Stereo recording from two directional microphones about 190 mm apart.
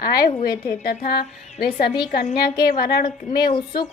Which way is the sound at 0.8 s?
55° left (ahead or behind).